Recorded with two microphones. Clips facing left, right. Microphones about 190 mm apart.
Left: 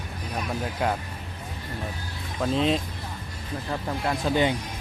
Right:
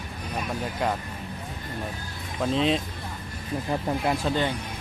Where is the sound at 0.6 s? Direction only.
Centre (ahead or behind).